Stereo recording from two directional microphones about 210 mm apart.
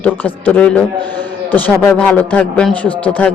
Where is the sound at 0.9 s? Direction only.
20° right (ahead or behind).